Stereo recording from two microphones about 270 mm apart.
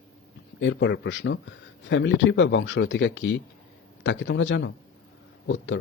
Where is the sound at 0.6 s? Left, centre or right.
Left.